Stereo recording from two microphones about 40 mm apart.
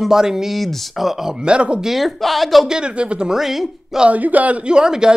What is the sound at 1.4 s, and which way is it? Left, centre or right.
Speech, right.